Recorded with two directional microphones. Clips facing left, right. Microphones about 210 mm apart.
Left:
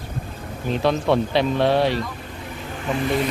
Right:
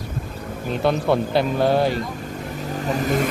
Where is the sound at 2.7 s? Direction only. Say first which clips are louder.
Even; 40° right (ahead or behind).